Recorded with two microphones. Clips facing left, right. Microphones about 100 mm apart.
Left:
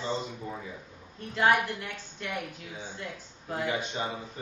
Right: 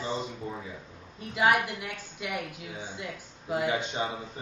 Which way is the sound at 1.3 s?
10° right (ahead or behind).